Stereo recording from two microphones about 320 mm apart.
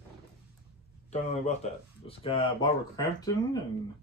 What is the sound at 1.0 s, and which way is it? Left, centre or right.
Speech, centre.